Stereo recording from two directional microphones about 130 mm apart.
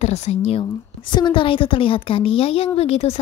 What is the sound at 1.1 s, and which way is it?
A woman's voice, 35° left (ahead or behind).